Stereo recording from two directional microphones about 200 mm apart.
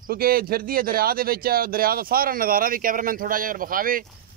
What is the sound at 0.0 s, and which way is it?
Speech, 50° right (ahead or behind).